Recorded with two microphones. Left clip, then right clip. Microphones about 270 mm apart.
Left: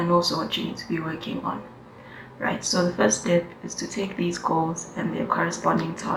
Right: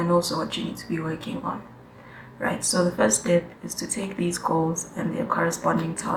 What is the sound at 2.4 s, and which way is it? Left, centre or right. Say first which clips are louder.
Speech: even; centre.